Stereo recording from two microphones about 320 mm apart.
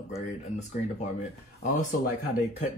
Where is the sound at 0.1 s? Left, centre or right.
Left.